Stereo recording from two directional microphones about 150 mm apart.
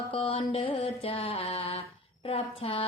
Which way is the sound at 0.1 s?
35° left (ahead or behind).